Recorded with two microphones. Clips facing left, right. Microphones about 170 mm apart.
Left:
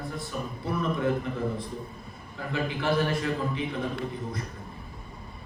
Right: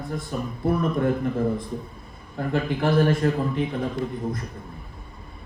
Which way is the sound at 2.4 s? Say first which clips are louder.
Right 6 dB; 50° right (ahead or behind).